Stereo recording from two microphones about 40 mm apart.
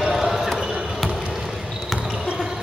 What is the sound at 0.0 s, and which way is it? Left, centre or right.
Basketball bounce, centre.